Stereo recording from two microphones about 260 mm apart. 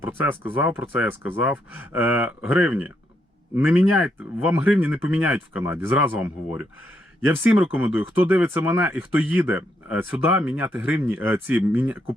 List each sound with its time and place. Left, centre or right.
0.0 s speech: centre